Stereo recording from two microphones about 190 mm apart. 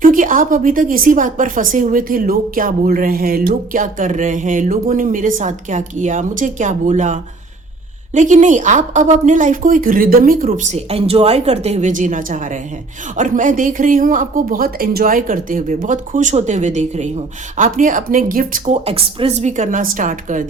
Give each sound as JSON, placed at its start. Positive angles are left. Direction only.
{"t": 0.0, "sound": "a woman's voice", "side_deg": -45}